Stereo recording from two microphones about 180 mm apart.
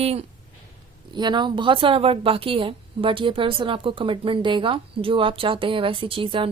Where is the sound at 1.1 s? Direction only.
25° right (ahead or behind).